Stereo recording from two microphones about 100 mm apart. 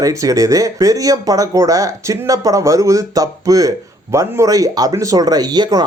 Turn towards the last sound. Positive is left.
turn(degrees=-45)  # may be behind; listen again after turning